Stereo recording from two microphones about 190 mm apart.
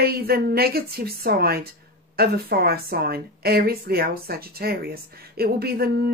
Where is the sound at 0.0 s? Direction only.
55° right (ahead or behind).